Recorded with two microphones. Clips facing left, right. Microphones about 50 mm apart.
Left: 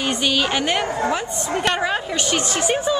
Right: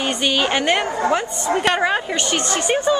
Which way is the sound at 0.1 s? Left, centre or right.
Centre.